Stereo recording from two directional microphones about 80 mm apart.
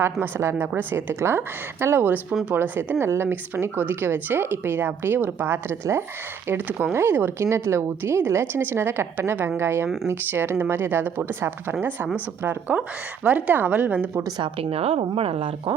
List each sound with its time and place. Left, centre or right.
0.0 s a woman's voice: right
14.3 s speech: right